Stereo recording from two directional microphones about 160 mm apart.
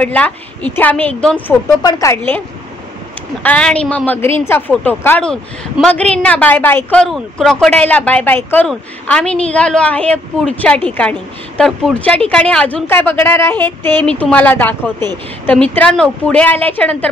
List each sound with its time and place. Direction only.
0.0 s a woman's voice: 10° left (ahead or behind)
1.8 s speech: 20° left (ahead or behind)
3.4 s a woman's voice: 10° left (ahead or behind)